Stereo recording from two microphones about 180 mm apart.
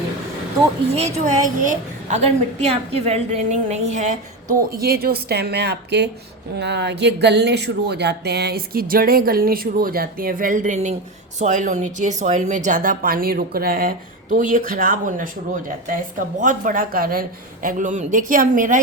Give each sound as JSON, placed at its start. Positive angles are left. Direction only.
{"t": 0.9, "sound": "a woman's voice", "side_deg": -40}